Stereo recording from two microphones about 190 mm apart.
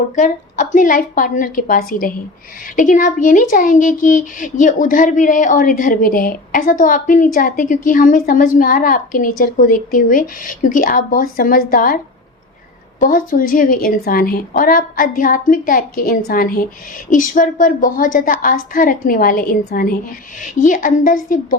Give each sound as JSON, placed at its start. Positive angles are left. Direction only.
{"t": 0.2, "sound": "speech", "side_deg": 40}
{"t": 13.0, "sound": "speech", "side_deg": 45}